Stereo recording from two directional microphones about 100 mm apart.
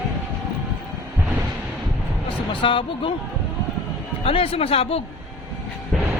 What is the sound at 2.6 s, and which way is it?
Speech, 60° left (ahead or behind).